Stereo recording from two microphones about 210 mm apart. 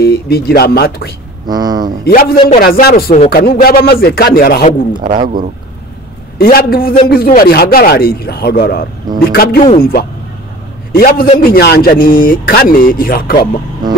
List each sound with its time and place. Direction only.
0.0 s speech: 45° left (ahead or behind)
1.5 s speech: 20° right (ahead or behind)
2.0 s speech: 45° left (ahead or behind)
4.9 s speech: 35° right (ahead or behind)
6.3 s a man's voice: 45° left (ahead or behind)